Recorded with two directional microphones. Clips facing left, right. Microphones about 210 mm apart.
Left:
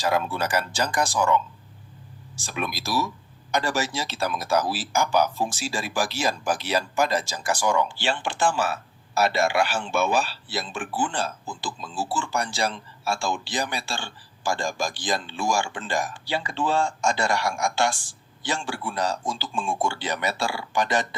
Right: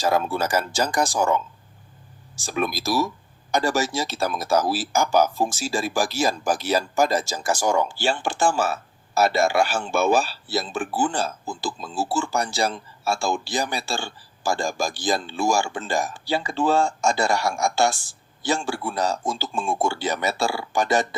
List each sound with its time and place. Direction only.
0.0 s speech: 45° right (ahead or behind)
2.5 s speech: 40° right (ahead or behind)